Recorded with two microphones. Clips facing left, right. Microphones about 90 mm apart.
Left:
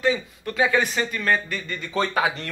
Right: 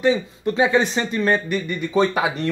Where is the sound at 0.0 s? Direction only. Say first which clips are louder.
Right 5 dB; 25° right (ahead or behind).